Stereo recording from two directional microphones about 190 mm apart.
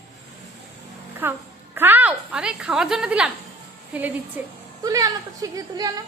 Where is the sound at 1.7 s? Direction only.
10° right (ahead or behind).